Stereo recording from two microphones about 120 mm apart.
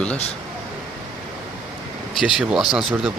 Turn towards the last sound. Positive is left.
turn(degrees=-5)  # may be behind; listen again after turning